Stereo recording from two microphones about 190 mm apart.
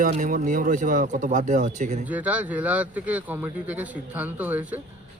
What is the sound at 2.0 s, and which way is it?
A man's voice, 10° right (ahead or behind).